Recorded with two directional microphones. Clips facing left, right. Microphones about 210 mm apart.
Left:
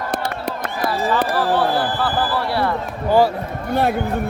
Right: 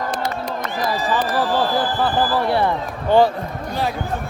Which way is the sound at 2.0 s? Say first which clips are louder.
Right 2 dB; 20° right (ahead or behind).